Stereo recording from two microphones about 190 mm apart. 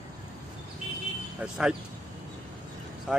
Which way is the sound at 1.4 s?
5° right (ahead or behind).